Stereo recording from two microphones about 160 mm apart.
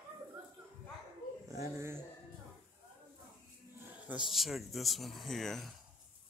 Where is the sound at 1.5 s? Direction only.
20° right (ahead or behind).